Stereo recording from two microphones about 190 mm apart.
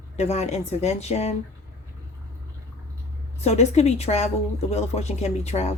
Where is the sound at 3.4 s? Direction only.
35° left (ahead or behind).